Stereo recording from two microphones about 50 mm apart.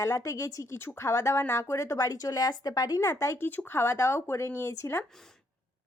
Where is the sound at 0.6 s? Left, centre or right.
Left.